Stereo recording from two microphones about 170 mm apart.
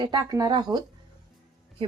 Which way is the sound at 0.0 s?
25° right (ahead or behind).